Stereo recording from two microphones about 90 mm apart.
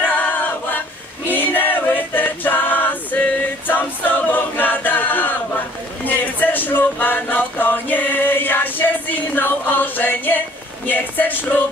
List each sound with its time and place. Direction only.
0.1 s choir: 20° left (ahead or behind)
6.0 s music: 20° left (ahead or behind)
10.9 s a woman's voice: 20° left (ahead or behind)